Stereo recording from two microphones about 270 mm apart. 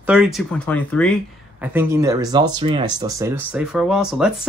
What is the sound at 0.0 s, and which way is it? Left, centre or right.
Speech, centre.